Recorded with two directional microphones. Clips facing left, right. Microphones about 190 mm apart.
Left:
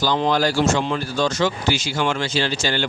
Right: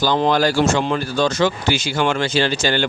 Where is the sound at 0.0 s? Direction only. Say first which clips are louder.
Right 3 dB; 55° right (ahead or behind).